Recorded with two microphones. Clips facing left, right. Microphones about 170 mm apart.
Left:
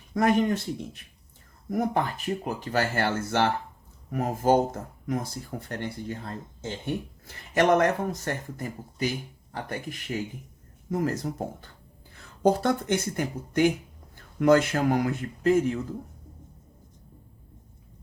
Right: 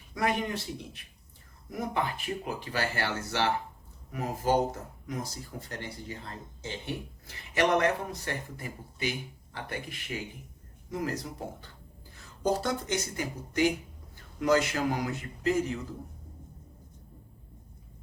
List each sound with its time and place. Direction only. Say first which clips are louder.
0.1 s speech: left 7 dB; 45° left (ahead or behind)
1.7 s speech: left 5 dB; 45° left (ahead or behind)